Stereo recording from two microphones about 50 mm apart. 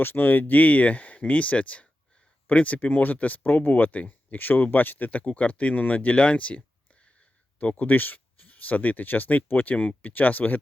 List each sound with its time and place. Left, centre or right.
0.0 s speech: left
7.6 s speech: left